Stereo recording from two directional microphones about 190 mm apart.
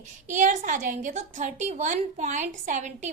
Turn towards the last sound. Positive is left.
turn(degrees=-40)  # may be behind; listen again after turning